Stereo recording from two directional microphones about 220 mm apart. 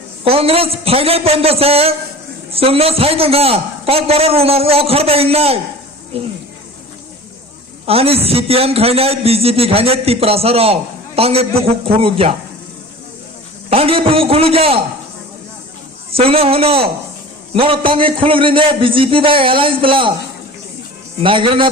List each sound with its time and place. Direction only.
0.3 s a man's voice: 25° right (ahead or behind)
7.9 s a man's voice: 25° right (ahead or behind)
13.7 s a man's voice: 25° right (ahead or behind)
16.1 s a man's voice: 25° right (ahead or behind)
21.2 s a man's voice: 25° right (ahead or behind)